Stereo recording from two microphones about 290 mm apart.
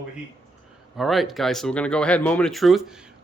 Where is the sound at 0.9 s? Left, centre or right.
Centre.